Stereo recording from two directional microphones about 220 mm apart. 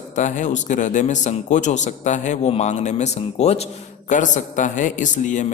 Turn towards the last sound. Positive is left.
turn(degrees=35)  # may be behind; listen again after turning